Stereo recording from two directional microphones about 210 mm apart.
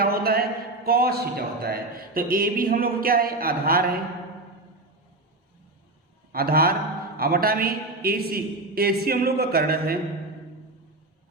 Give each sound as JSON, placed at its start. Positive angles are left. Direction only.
{"t": 0.0, "sound": "a sound", "side_deg": -45}
{"t": 0.9, "sound": "a man's voice", "side_deg": -45}
{"t": 6.3, "sound": "a man's voice", "side_deg": -45}